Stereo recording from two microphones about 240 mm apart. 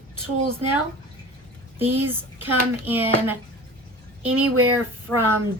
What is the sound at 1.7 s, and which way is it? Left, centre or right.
A child's voice, centre.